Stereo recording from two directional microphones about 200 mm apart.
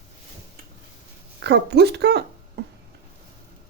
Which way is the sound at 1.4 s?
60° right (ahead or behind).